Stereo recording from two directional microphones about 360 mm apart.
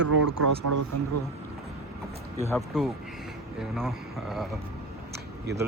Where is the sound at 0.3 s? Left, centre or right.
Right.